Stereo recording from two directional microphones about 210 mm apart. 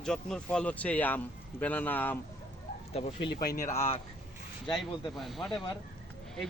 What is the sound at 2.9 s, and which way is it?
Speech, 30° left (ahead or behind).